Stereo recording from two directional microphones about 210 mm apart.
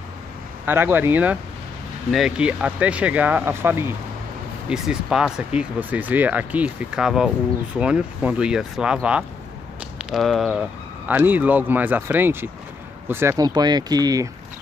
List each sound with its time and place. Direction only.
0.7 s speech: 10° right (ahead or behind)